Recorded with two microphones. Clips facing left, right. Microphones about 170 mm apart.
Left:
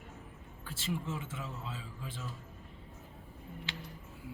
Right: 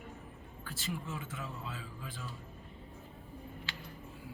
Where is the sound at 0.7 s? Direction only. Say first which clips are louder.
Left 3 dB; 25° left (ahead or behind).